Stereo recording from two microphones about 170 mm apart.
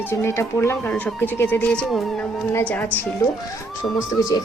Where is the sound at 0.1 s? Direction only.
15° left (ahead or behind).